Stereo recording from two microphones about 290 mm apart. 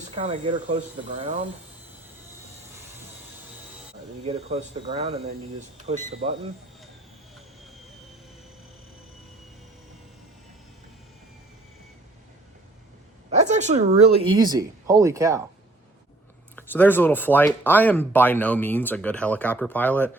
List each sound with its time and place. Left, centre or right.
0.2 s speech: right
4.2 s speech: right
13.3 s speech: right
16.6 s speech: centre